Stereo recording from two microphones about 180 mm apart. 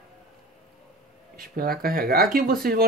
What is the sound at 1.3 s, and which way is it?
Speech, 55° right (ahead or behind).